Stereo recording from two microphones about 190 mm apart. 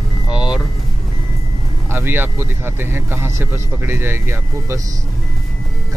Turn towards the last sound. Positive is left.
turn(degrees=-15)  # may be behind; listen again after turning